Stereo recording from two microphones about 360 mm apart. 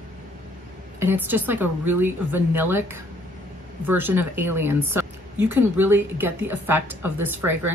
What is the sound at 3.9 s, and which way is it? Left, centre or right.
A woman's voice, centre.